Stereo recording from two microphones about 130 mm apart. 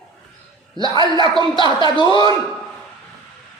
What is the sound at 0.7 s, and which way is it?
A man's voice, 35° right (ahead or behind).